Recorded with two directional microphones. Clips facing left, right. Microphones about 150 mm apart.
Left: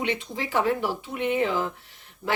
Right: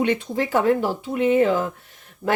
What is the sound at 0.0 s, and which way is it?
Speech, 50° right (ahead or behind).